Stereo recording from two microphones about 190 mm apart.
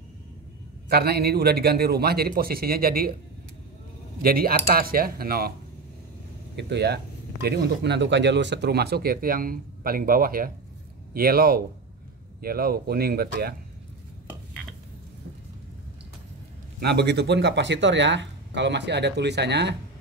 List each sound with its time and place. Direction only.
0.8 s speech: 55° right (ahead or behind)
4.2 s speech: 50° right (ahead or behind)
6.5 s speech: 60° right (ahead or behind)
16.8 s speech: 60° right (ahead or behind)